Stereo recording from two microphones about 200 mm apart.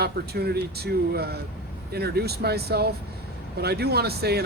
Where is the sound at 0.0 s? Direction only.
55° right (ahead or behind).